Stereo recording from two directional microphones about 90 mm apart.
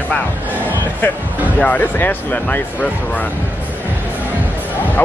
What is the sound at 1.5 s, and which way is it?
Speech, 20° left (ahead or behind).